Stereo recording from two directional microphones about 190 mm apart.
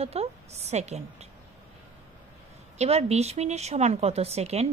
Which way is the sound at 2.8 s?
35° right (ahead or behind).